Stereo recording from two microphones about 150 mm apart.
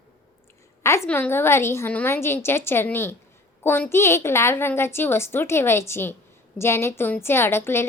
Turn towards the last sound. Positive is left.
turn(degrees=15)  # may be behind; listen again after turning